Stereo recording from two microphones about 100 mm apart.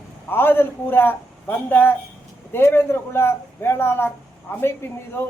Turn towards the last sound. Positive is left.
turn(degrees=25)  # may be behind; listen again after turning